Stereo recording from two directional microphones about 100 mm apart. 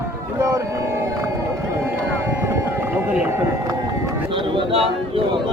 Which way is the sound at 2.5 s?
15° right (ahead or behind).